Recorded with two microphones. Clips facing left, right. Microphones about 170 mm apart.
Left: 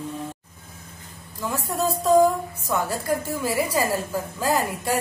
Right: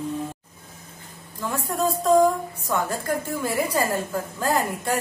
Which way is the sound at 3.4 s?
5° left (ahead or behind).